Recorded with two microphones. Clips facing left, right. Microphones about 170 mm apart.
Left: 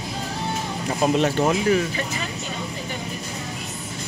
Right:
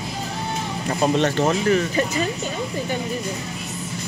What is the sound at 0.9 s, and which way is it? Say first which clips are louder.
Speech: right 1 dB; 5° left (ahead or behind).